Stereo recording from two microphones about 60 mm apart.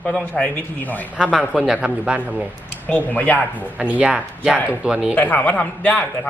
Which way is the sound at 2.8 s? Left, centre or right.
Left.